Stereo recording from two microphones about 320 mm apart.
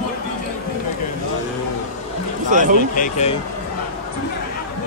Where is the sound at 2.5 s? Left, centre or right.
Right.